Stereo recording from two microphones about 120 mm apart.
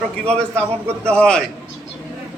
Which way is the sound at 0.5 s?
20° right (ahead or behind).